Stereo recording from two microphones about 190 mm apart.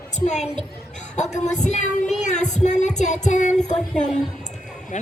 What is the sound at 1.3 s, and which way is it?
Music, 40° left (ahead or behind).